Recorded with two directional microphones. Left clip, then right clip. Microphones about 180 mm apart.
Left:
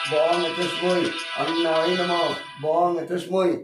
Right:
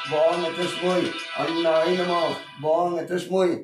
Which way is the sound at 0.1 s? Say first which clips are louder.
Right 1 dB; 30° left (ahead or behind).